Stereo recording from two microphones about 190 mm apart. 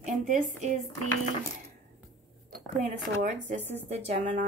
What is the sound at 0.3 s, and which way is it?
Speech, 40° right (ahead or behind).